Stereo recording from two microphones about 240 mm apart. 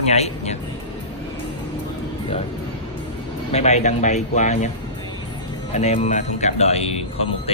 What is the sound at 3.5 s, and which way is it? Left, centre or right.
Speech, left.